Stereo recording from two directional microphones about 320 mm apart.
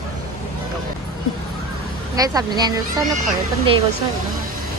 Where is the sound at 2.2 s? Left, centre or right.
Centre.